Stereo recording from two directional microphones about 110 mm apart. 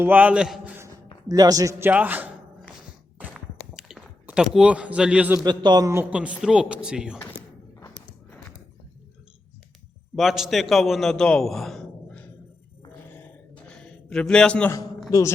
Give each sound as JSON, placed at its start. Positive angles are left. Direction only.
{"t": 0.0, "sound": "a man's voice", "side_deg": -15}
{"t": 1.3, "sound": "a man's voice", "side_deg": -35}
{"t": 1.8, "sound": "speech", "side_deg": -15}
{"t": 3.2, "sound": "a sound", "side_deg": -10}
{"t": 4.3, "sound": "speech", "side_deg": -10}
{"t": 5.5, "sound": "a man's voice", "side_deg": -40}
{"t": 6.1, "sound": "speech", "side_deg": -10}
{"t": 10.2, "sound": "a man's voice", "side_deg": 0}
{"t": 13.7, "sound": "a sound", "side_deg": 5}